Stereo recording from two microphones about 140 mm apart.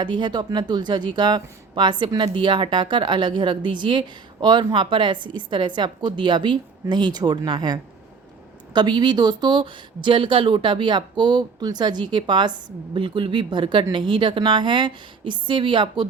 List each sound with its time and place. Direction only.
0.0 s speech: 35° right (ahead or behind)